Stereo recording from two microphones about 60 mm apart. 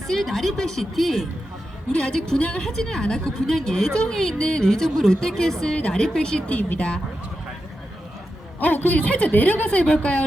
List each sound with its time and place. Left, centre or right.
0.1 s a woman's voice: centre
1.9 s a woman's voice: centre
6.5 s a woman's voice: left
8.5 s a woman's voice: left